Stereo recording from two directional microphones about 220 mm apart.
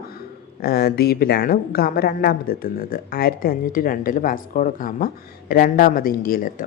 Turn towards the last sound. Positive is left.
turn(degrees=40)  # may be behind; listen again after turning